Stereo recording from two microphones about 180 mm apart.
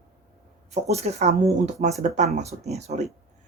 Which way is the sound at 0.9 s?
35° right (ahead or behind).